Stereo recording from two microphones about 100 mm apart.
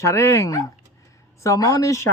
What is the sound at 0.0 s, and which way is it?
Speech, 30° left (ahead or behind).